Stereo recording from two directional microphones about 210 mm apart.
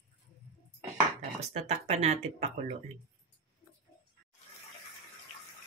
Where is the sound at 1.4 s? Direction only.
30° right (ahead or behind).